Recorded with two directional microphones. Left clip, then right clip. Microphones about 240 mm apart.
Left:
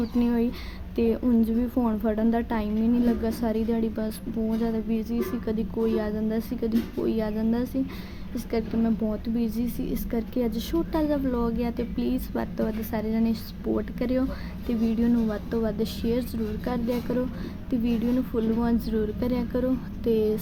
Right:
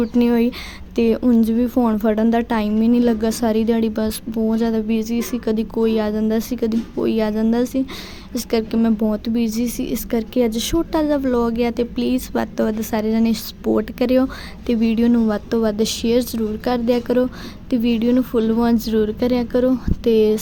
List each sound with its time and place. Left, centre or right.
0.0 s a woman's voice: right